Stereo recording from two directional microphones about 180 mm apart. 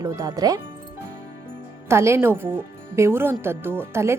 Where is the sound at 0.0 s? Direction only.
20° right (ahead or behind).